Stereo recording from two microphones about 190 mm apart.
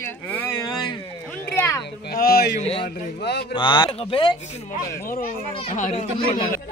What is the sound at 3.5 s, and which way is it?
Speech, 25° left (ahead or behind).